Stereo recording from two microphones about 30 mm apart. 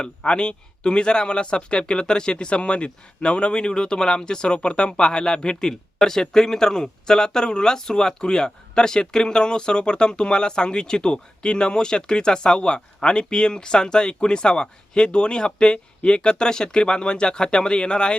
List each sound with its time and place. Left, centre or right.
0.0 s a man's voice: left